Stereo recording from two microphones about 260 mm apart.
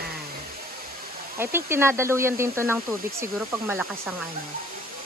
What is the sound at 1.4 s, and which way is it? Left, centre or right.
Speech, centre.